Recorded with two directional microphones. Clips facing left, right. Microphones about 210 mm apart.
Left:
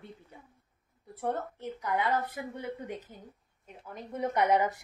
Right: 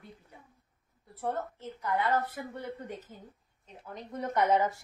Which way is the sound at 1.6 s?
15° left (ahead or behind).